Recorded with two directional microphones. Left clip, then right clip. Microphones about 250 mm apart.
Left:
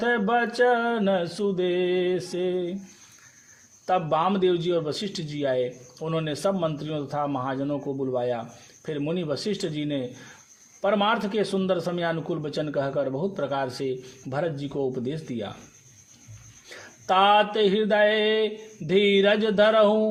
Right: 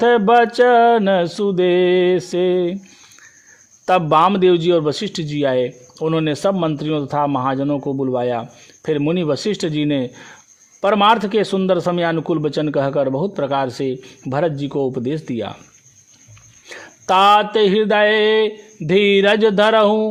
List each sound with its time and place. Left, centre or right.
0.0 s a man's voice: right
3.8 s a man's voice: right
16.6 s a man's voice: right